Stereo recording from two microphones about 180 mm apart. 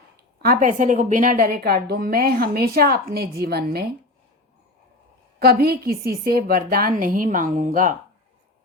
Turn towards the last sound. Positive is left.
turn(degrees=-45)  # may be behind; listen again after turning